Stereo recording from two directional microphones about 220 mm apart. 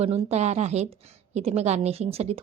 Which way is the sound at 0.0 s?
30° right (ahead or behind).